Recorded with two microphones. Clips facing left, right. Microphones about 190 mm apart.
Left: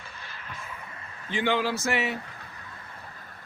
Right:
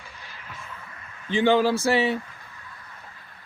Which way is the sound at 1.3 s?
25° right (ahead or behind).